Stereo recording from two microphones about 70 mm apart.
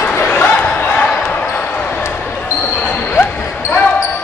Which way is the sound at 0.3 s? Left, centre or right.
Left.